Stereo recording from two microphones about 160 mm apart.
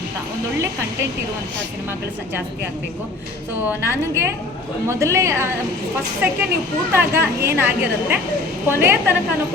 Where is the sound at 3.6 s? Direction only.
15° right (ahead or behind).